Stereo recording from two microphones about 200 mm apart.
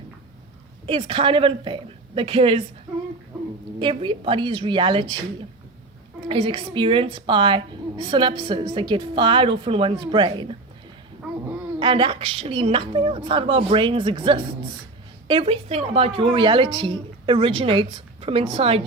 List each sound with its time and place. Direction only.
0.9 s a woman's voice: 30° right (ahead or behind)
3.8 s a woman's voice: 25° right (ahead or behind)
6.2 s a woman's voice: 25° right (ahead or behind)
11.8 s a woman's voice: 25° right (ahead or behind)